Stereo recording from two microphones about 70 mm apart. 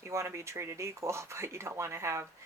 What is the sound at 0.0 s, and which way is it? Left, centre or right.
Speech, right.